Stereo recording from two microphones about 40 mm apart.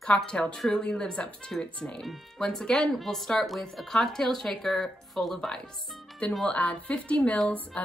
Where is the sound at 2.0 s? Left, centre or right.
Centre.